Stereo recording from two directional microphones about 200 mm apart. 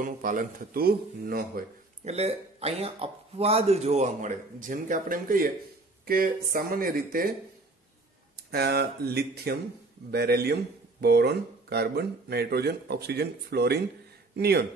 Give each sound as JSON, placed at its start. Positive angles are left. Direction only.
{"t": 0.0, "sound": "speech", "side_deg": -45}
{"t": 2.1, "sound": "speech", "side_deg": -30}
{"t": 8.5, "sound": "speech", "side_deg": -55}